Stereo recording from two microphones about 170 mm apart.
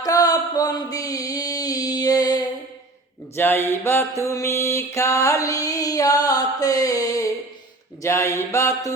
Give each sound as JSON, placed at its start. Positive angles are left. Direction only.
{"t": 0.0, "sound": "music", "side_deg": 20}
{"t": 3.3, "sound": "mantra", "side_deg": 15}